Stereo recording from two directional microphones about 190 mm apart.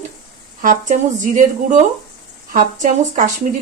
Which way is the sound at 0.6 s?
40° right (ahead or behind).